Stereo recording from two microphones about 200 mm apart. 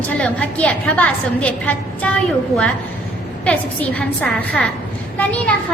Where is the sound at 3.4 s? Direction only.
5° left (ahead or behind).